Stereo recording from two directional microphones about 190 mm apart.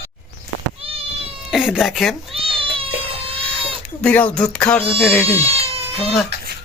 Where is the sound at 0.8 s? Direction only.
30° right (ahead or behind).